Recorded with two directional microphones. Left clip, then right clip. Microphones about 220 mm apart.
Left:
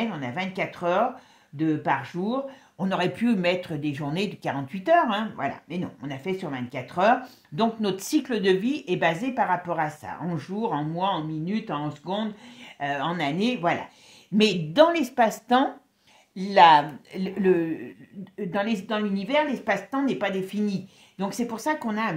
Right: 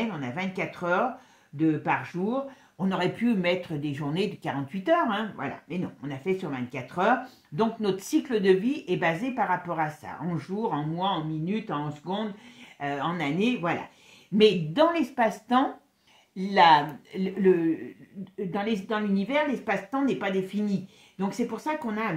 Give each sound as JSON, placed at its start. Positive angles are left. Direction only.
{"t": 0.2, "sound": "speech", "side_deg": 30}